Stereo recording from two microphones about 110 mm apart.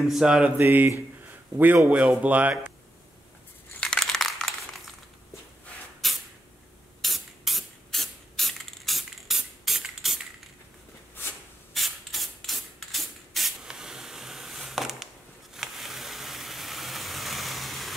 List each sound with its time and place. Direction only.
0.1 s mantra: 5° right (ahead or behind)
0.6 s speech: 20° right (ahead or behind)
3.8 s crushing: 5° left (ahead or behind)
6.0 s vehicle: centre (ahead or behind)
7.0 s spray: centre (ahead or behind)
11.7 s rub: centre (ahead or behind)
15.5 s a sound: centre (ahead or behind)